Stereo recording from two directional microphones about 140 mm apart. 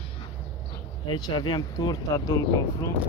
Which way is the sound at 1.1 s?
30° left (ahead or behind).